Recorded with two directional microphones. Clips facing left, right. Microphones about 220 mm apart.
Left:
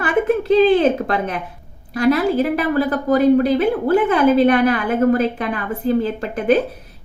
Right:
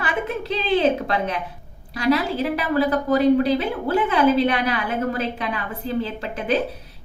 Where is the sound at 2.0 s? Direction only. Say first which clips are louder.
Left 5 dB; 50° left (ahead or behind).